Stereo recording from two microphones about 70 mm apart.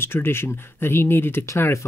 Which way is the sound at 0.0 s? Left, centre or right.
Left.